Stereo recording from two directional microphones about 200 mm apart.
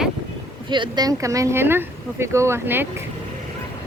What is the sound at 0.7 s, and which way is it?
Speech, 20° right (ahead or behind).